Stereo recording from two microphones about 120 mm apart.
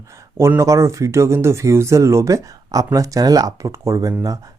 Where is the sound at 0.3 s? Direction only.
25° right (ahead or behind).